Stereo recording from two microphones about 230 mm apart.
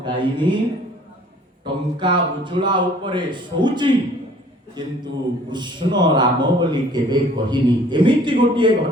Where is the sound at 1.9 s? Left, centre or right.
Right.